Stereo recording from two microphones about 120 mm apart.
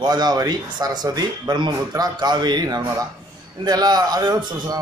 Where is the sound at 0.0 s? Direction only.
35° right (ahead or behind).